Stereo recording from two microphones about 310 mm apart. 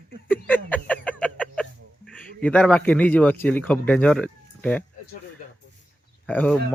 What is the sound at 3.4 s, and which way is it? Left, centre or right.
Speech, centre.